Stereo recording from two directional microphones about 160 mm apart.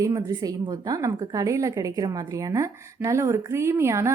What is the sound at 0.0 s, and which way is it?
A woman's voice, 20° right (ahead or behind).